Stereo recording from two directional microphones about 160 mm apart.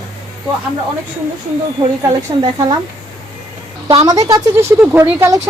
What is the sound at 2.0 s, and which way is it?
Speech, 25° right (ahead or behind).